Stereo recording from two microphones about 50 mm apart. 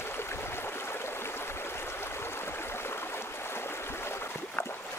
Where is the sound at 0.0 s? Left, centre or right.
Left.